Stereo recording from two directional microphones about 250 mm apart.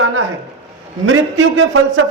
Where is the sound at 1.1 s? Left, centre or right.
Right.